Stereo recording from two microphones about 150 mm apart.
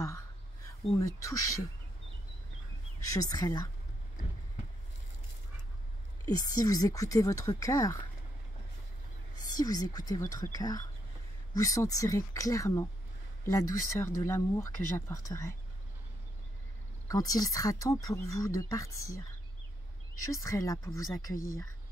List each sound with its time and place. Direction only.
0.9 s speech: 20° left (ahead or behind)
3.1 s speech: 25° left (ahead or behind)
6.2 s speech: 25° left (ahead or behind)
9.5 s speech: 25° left (ahead or behind)
17.1 s speech: 25° left (ahead or behind)